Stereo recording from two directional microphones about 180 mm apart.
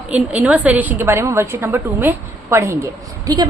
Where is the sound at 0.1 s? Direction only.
10° right (ahead or behind).